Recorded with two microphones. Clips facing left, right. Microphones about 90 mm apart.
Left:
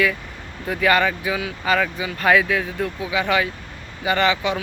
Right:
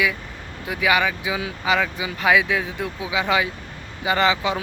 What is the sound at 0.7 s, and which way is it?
Speech, 5° right (ahead or behind).